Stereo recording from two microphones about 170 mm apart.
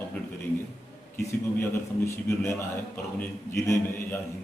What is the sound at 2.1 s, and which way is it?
A man's voice, 15° left (ahead or behind).